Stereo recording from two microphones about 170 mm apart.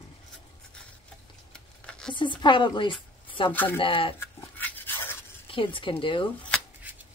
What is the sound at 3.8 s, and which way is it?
Speech, 30° left (ahead or behind).